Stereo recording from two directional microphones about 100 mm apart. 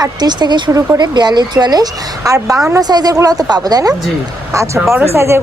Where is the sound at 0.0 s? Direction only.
45° right (ahead or behind).